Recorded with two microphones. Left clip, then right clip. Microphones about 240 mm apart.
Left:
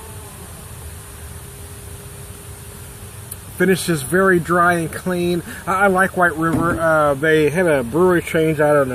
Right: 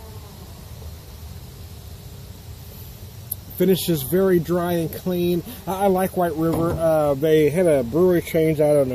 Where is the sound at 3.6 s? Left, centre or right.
Centre.